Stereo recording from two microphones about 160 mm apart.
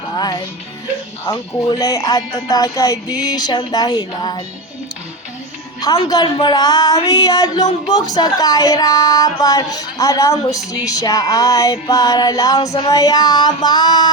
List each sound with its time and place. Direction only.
0.2 s music: 25° left (ahead or behind)
1.3 s a woman's voice: 20° left (ahead or behind)
5.8 s a woman's voice: 25° left (ahead or behind)